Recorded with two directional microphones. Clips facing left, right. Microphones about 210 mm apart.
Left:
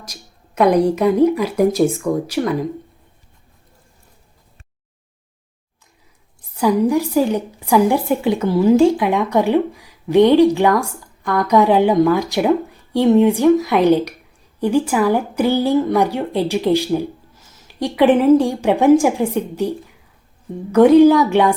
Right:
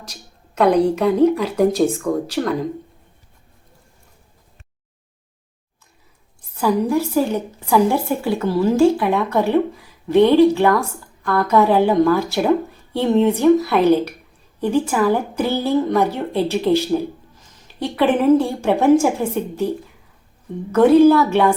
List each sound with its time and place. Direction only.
0.0 s a woman's voice: 10° left (ahead or behind)
6.5 s a woman's voice: 15° left (ahead or behind)
20.7 s a woman's voice: 15° left (ahead or behind)